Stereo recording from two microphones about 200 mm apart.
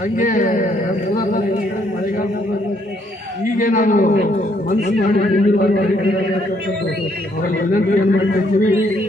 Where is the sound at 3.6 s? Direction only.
40° left (ahead or behind).